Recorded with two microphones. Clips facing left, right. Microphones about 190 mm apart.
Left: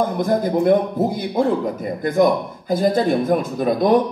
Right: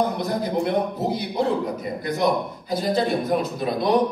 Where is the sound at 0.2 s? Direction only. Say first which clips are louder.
Left 6 dB; 45° left (ahead or behind).